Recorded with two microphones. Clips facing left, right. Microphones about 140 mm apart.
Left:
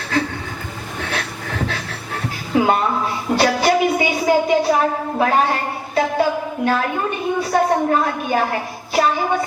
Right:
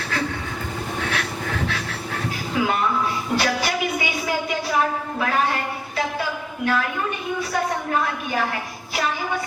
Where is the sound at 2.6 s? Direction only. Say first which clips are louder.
Left 5 dB; 35° left (ahead or behind).